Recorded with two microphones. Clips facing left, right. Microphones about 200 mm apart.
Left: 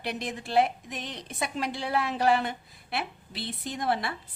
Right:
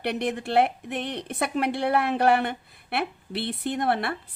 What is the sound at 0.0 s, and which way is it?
A woman's voice, 60° right (ahead or behind).